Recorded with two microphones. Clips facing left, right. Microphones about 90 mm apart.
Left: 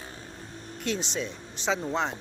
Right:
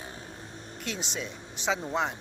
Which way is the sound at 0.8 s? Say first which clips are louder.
Left 5 dB; 5° right (ahead or behind).